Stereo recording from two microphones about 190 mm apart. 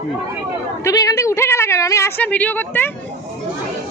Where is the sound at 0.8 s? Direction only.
20° left (ahead or behind).